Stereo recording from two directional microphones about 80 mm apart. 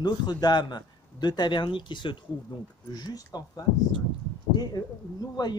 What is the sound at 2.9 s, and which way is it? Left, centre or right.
Speech, left.